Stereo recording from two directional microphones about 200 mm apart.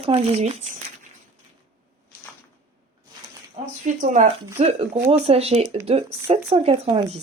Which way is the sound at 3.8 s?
40° right (ahead or behind).